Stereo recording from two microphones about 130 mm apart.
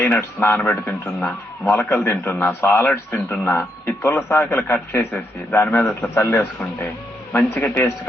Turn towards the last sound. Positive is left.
turn(degrees=15)  # may be behind; listen again after turning